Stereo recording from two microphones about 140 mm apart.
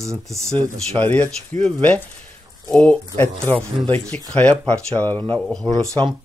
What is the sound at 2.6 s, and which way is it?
Speech, 5° left (ahead or behind).